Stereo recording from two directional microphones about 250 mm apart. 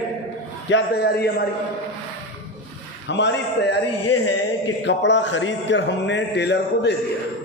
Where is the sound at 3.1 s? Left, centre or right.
Left.